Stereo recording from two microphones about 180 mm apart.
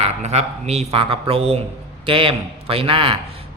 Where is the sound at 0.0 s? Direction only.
35° right (ahead or behind).